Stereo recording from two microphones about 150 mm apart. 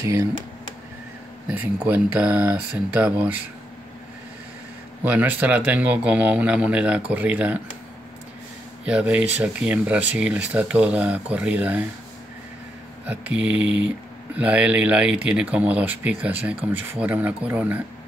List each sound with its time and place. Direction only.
0.0 s speech: 20° right (ahead or behind)
1.5 s speech: 10° right (ahead or behind)
5.0 s speech: 10° right (ahead or behind)
8.8 s speech: 10° right (ahead or behind)
13.0 s speech: 10° right (ahead or behind)